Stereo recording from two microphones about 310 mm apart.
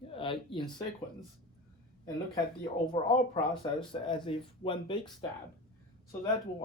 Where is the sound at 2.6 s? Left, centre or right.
Centre.